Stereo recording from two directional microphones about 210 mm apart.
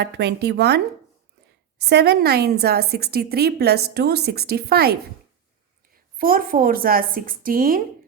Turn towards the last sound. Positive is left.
turn(degrees=-45)  # may be behind; listen again after turning